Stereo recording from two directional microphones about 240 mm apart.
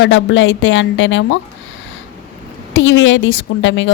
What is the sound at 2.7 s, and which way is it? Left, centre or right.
A woman's voice, left.